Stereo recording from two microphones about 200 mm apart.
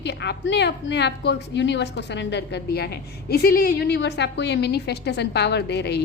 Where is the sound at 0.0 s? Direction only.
60° left (ahead or behind).